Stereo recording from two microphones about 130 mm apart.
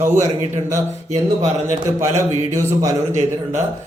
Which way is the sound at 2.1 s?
25° right (ahead or behind).